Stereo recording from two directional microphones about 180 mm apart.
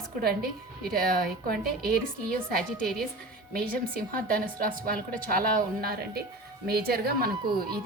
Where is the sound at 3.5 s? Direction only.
55° right (ahead or behind).